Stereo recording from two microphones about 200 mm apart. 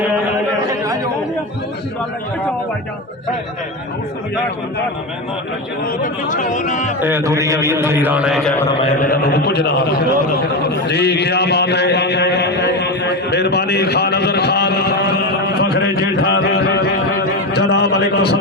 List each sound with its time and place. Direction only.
5.8 s speech: 40° left (ahead or behind)
7.0 s a man's voice: 15° right (ahead or behind)
9.0 s speech: 50° left (ahead or behind)
10.7 s a sound: 55° left (ahead or behind)